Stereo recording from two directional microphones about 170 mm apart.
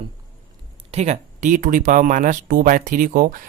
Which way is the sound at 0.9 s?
40° right (ahead or behind).